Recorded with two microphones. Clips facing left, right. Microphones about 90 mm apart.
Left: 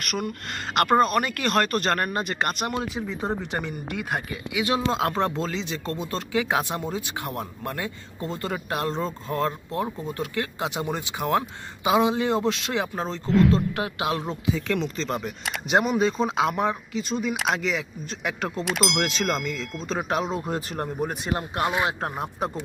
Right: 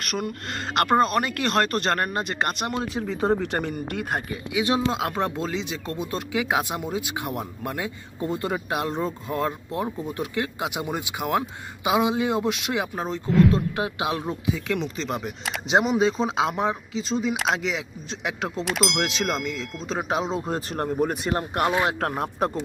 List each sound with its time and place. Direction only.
0.0 s speech: 35° right (ahead or behind)
3.0 s speech: 85° right
3.4 s speech: 50° right (ahead or behind)
4.3 s speech: 25° right (ahead or behind)
4.9 s speech: 10° right (ahead or behind)
13.7 s speech: 20° right (ahead or behind)
18.6 s speech: centre (ahead or behind)
19.0 s speech: 15° right (ahead or behind)
20.7 s speech: 45° right (ahead or behind)